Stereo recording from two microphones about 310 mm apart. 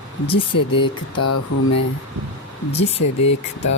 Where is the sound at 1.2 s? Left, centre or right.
Left.